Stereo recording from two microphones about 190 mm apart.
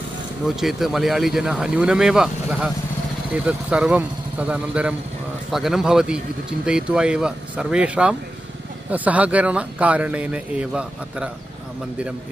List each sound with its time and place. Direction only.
0.6 s speech: centre (ahead or behind)